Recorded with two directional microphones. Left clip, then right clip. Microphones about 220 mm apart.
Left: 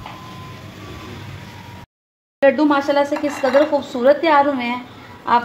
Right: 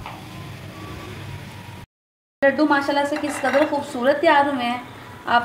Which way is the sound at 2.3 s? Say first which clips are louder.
Left 4 dB; 45° left (ahead or behind).